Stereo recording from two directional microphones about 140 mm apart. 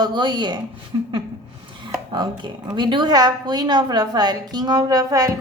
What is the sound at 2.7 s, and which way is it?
A woman's voice, 35° right (ahead or behind).